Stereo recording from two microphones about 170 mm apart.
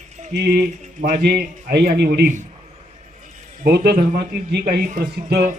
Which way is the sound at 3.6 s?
65° right (ahead or behind).